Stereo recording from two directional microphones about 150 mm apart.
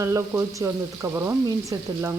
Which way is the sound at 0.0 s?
20° right (ahead or behind).